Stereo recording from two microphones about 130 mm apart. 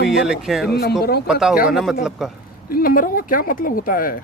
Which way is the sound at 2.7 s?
90° left.